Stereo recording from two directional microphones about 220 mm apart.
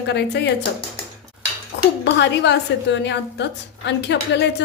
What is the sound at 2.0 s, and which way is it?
A woman's voice, 50° left (ahead or behind).